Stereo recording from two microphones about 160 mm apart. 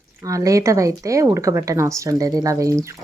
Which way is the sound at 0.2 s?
20° right (ahead or behind).